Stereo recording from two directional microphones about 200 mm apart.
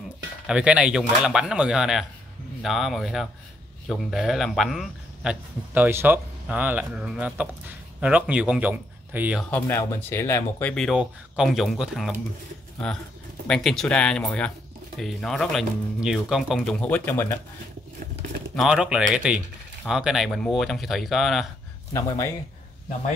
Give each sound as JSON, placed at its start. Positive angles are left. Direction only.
{"t": 0.5, "sound": "speech", "side_deg": -5}
{"t": 9.5, "sound": "speech", "side_deg": 10}
{"t": 13.5, "sound": "speech", "side_deg": 0}
{"t": 18.6, "sound": "speech", "side_deg": -5}
{"t": 21.9, "sound": "speech", "side_deg": 15}